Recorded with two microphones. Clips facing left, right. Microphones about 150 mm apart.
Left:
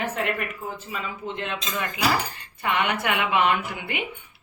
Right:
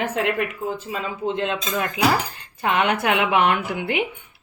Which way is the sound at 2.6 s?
85° right.